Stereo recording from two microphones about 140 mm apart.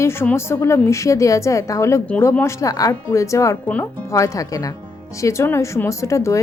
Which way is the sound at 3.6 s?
10° left (ahead or behind).